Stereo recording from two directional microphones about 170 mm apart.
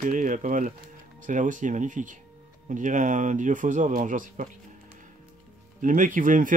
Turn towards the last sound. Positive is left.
turn(degrees=-50)  # may be behind; listen again after turning